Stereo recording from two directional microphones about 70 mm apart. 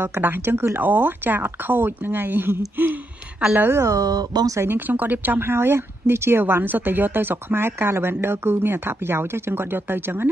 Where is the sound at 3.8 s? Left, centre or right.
Right.